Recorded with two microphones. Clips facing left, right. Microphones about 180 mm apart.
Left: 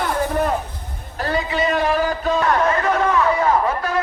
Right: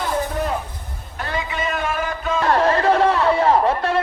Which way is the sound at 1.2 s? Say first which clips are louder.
Left 5 dB; 35° left (ahead or behind).